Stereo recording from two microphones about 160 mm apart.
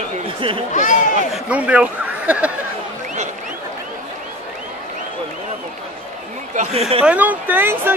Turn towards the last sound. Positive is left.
turn(degrees=-15)  # may be behind; listen again after turning